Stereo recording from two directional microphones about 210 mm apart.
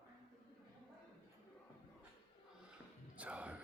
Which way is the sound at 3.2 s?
5° right (ahead or behind).